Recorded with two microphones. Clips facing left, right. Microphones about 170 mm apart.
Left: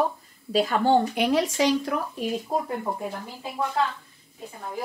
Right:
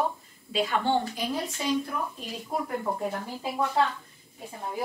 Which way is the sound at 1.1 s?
75° left (ahead or behind).